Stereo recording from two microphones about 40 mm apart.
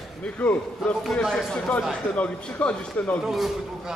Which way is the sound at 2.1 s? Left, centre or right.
Left.